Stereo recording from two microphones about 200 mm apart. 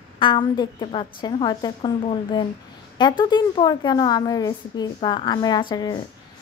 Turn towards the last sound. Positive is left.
turn(degrees=20)  # may be behind; listen again after turning